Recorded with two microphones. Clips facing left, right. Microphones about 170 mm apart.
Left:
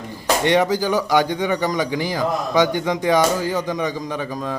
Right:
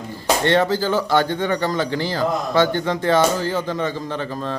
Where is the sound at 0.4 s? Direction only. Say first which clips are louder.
Left 1 dB; 15° left (ahead or behind).